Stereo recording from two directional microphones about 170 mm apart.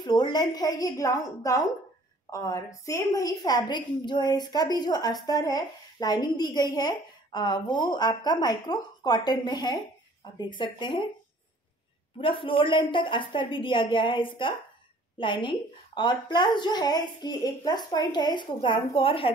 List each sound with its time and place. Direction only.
0.0 s a woman's voice: 25° left (ahead or behind)
12.2 s a woman's voice: 30° left (ahead or behind)